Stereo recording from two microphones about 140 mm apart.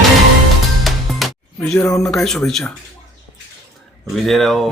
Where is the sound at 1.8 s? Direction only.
20° left (ahead or behind).